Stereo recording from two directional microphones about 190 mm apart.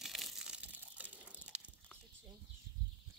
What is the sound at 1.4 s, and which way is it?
Biting, 5° right (ahead or behind).